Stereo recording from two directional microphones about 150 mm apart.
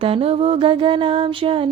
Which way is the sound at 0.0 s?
40° right (ahead or behind).